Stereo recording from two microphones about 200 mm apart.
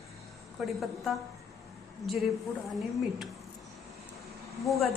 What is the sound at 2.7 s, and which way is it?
Speech, centre (ahead or behind).